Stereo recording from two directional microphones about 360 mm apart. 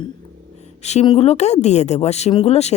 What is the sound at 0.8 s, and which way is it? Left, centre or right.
A woman's voice, centre.